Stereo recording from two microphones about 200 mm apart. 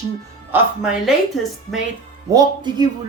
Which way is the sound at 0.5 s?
5° right (ahead or behind).